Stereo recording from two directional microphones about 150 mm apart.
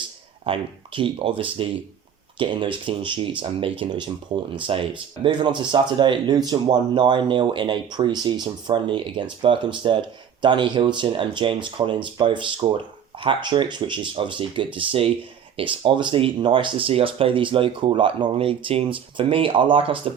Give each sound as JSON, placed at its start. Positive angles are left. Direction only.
{"t": 0.4, "sound": "speech", "side_deg": -35}